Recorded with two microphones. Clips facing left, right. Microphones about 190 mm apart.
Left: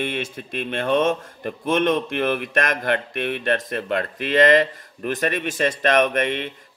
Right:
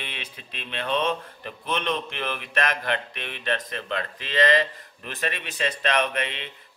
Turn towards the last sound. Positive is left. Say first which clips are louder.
# left 7 dB
turn(degrees=50)  # may be behind; listen again after turning